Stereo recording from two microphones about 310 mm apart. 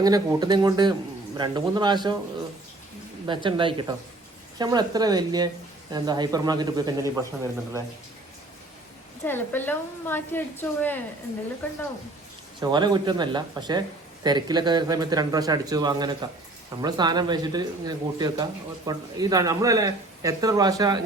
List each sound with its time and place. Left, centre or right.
0.0 s speech: centre
3.2 s speech: centre
9.2 s a woman's voice: centre
12.5 s speech: centre